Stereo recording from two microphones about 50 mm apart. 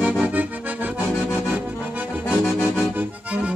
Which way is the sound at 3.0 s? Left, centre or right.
Right.